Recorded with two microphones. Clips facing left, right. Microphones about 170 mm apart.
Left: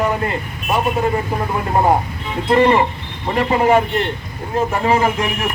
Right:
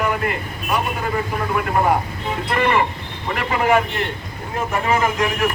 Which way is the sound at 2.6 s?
30° left (ahead or behind).